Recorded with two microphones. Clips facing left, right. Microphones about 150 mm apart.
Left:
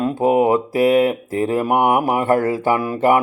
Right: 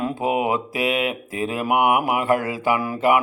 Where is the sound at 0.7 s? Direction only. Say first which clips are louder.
Left 8 dB; 35° left (ahead or behind).